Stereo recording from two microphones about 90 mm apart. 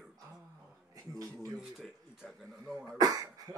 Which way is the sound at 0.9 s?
40° right (ahead or behind).